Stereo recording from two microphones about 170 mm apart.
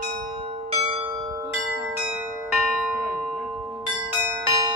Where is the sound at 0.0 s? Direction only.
40° right (ahead or behind); by 1.6 s 20° right (ahead or behind).